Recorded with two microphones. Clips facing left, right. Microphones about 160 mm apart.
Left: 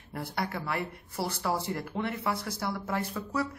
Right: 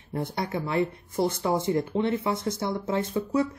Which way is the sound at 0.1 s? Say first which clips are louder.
Right 5 dB; 25° right (ahead or behind).